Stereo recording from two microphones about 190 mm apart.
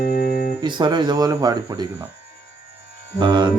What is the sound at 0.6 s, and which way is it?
Mantra, 25° right (ahead or behind).